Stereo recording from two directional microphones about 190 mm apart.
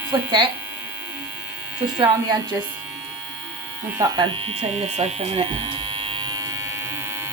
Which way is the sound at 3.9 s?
20° right (ahead or behind).